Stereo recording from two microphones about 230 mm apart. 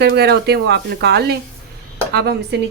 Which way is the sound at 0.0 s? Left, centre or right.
Right.